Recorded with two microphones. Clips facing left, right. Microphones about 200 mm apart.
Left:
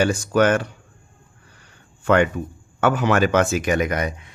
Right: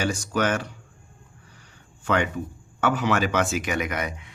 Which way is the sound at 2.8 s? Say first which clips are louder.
Left 5 dB; 50° left (ahead or behind).